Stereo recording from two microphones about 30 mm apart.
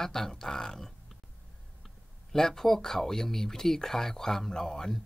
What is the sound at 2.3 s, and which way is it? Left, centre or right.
Speech, centre.